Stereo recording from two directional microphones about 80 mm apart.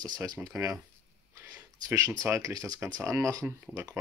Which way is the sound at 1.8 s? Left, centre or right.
Right.